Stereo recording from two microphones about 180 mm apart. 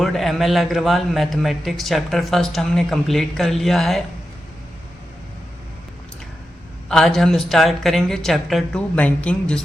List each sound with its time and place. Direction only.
0.0 s a man's voice: centre (ahead or behind)
6.8 s a man's voice: 5° left (ahead or behind)